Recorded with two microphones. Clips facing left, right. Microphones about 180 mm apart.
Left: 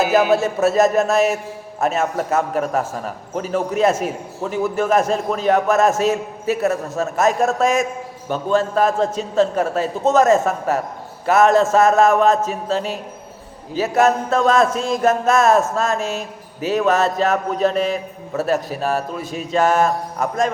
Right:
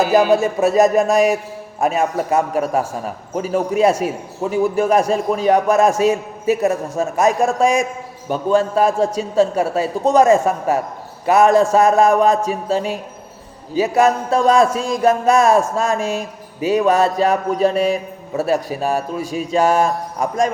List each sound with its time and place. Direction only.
0.3 s a man's voice: 15° right (ahead or behind)